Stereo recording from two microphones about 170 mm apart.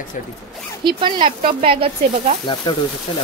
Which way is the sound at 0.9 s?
30° right (ahead or behind).